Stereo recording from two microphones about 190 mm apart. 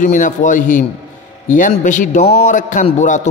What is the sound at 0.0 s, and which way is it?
A man's voice, 40° left (ahead or behind).